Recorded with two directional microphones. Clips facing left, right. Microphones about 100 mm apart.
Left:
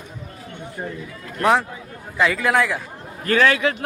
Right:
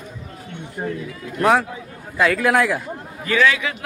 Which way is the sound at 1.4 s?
Centre (ahead or behind).